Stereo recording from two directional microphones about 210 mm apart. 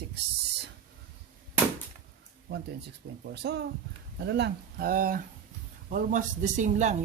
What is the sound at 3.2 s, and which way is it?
Speech, 50° right (ahead or behind).